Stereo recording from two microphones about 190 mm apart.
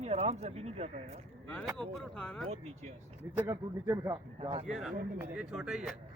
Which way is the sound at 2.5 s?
35° right (ahead or behind).